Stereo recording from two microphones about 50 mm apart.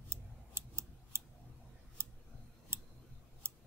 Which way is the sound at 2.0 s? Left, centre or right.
Right.